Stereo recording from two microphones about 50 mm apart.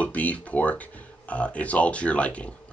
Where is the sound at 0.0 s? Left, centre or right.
Left.